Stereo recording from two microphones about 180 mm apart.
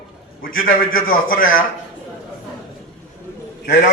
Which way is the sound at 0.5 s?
50° left (ahead or behind).